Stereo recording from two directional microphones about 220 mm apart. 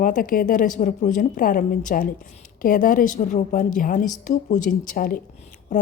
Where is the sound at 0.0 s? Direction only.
40° left (ahead or behind).